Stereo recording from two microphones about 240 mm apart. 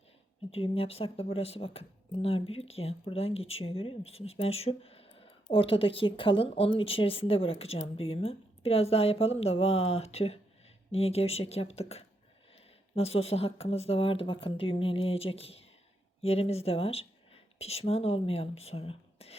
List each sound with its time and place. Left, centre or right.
0.5 s speech: left